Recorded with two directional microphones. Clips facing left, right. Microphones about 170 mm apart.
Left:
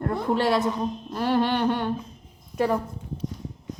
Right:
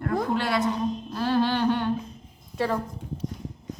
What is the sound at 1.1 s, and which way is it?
Humming, 15° left (ahead or behind).